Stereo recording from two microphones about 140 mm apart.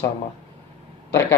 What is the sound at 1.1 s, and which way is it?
Speech, 15° left (ahead or behind).